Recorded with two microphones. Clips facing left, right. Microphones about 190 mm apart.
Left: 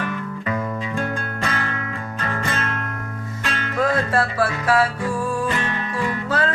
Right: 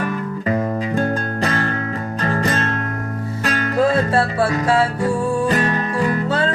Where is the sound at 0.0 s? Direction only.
35° right (ahead or behind).